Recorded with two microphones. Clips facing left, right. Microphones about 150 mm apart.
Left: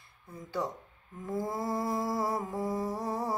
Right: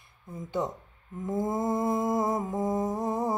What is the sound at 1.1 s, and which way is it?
Mantra, 20° right (ahead or behind).